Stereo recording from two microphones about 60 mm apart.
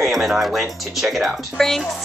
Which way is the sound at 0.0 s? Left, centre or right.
Centre.